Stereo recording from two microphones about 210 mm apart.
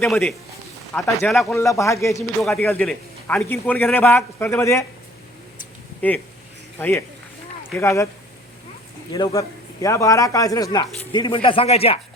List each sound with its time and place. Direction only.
0.1 s speech: 5° left (ahead or behind)
1.5 s a man's voice: 15° left (ahead or behind)
2.4 s a man's voice: centre (ahead or behind)
6.0 s a man's voice: 10° left (ahead or behind)
9.1 s a man's voice: 15° left (ahead or behind)